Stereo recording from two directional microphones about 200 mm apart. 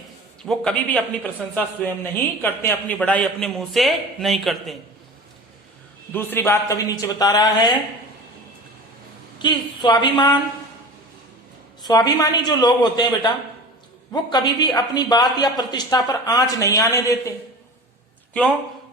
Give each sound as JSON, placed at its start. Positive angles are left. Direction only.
{"t": 0.4, "sound": "a man's voice", "side_deg": 5}
{"t": 6.1, "sound": "a man's voice", "side_deg": 10}
{"t": 9.4, "sound": "a man's voice", "side_deg": 20}
{"t": 11.8, "sound": "a man's voice", "side_deg": 20}